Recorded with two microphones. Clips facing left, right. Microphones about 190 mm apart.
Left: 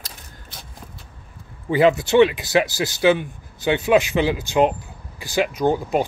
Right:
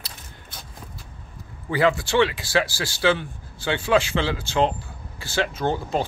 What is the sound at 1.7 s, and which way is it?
A man's voice, 20° left (ahead or behind).